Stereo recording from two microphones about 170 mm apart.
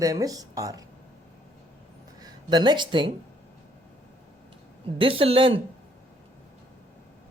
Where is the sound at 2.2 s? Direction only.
25° right (ahead or behind).